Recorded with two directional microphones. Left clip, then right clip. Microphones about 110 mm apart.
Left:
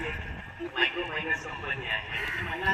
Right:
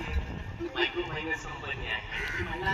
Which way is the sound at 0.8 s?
55° right (ahead or behind).